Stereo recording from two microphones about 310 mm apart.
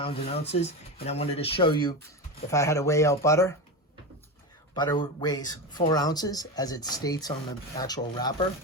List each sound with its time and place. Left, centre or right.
0.0 s speech: centre
4.7 s speech: centre